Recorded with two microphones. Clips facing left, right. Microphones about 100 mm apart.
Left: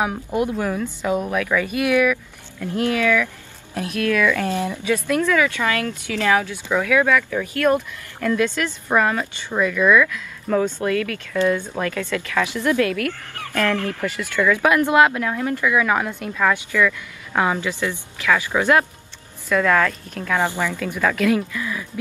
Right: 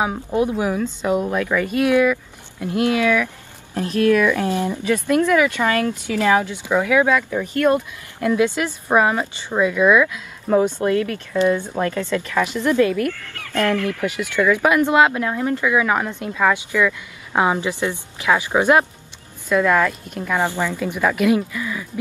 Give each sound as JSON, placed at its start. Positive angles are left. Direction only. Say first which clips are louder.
{"t": 0.4, "sound": "a woman's voice", "louder": "right 2 dB", "side_deg": -15}
{"t": 1.2, "sound": "a woman's voice", "louder": "right 1 dB", "side_deg": -20}
{"t": 13.7, "sound": "speech", "louder": "right 3 dB", "side_deg": 25}
{"t": 14.0, "sound": "a woman's voice", "louder": "right 1 dB", "side_deg": -20}